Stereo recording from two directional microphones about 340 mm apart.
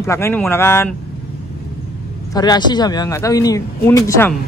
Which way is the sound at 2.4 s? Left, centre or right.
Centre.